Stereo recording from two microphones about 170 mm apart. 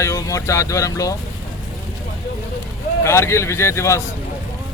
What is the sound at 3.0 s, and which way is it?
Speech, 15° left (ahead or behind).